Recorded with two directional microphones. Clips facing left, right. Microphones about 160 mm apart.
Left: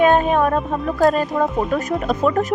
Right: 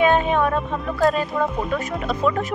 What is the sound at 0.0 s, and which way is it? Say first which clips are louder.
Music: left 3 dB; 45° left (ahead or behind).